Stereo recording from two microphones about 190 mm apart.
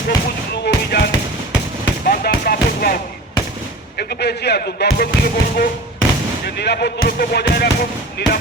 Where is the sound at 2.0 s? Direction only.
50° left (ahead or behind).